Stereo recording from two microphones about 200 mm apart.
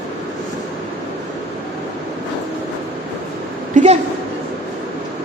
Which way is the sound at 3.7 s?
40° right (ahead or behind).